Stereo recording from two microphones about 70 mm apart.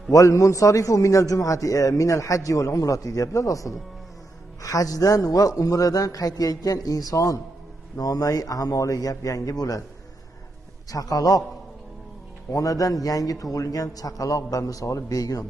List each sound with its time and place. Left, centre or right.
0.1 s a man's voice: left
10.8 s a man's voice: left
12.5 s a man's voice: left